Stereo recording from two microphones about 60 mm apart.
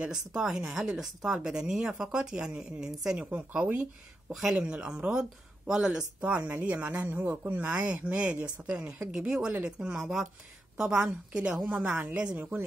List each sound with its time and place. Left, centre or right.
0.0 s speech: centre
3.2 s speech: right
4.3 s speech: centre
11.7 s speech: right